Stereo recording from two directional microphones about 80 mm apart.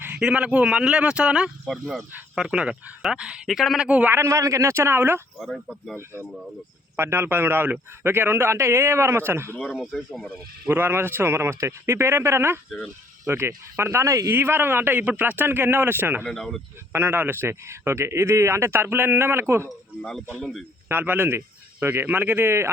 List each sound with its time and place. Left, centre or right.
0.2 s speech: centre
3.8 s speech: centre
4.1 s a man's voice: right
5.4 s speech: centre
6.9 s a man's voice: right
9.6 s speech: centre
10.7 s a man's voice: right
16.3 s speech: centre
16.9 s a man's voice: right
20.0 s speech: centre
20.8 s speech: right